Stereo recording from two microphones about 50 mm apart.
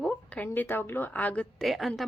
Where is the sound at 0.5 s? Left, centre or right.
Left.